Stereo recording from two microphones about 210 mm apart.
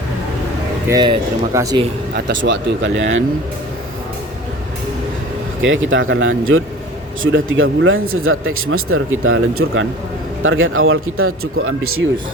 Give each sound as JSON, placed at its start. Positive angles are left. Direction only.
{"t": 0.9, "sound": "speech", "side_deg": -20}
{"t": 2.1, "sound": "speech", "side_deg": -55}
{"t": 5.6, "sound": "speech", "side_deg": -65}